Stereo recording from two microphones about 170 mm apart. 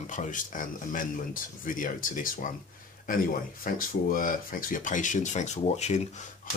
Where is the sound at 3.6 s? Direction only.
55° left (ahead or behind).